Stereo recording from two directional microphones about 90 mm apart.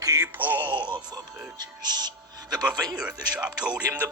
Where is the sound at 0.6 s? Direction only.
60° right (ahead or behind).